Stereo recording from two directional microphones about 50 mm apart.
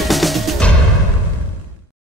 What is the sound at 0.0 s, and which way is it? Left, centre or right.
Music, centre.